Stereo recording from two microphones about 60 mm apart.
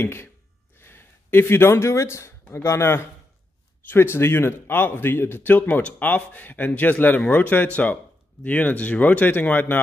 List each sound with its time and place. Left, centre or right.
0.0 s speech: left
0.7 s a sound: left
2.5 s a man's voice: left